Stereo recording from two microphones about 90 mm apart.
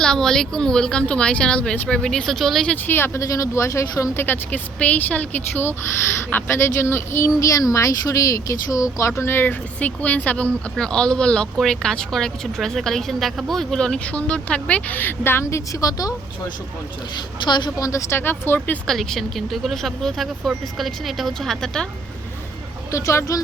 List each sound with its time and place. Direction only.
0.0 s speech: 5° left (ahead or behind)
2.6 s speech: 20° left (ahead or behind)
4.2 s speech: 20° left (ahead or behind); by 16.1 s 40° left (ahead or behind)
17.2 s a woman's voice: 55° left (ahead or behind)
17.7 s speech: 40° left (ahead or behind)
18.2 s speech: 25° left (ahead or behind)
18.9 s speech: 5° left (ahead or behind)
22.9 s speech: 35° left (ahead or behind)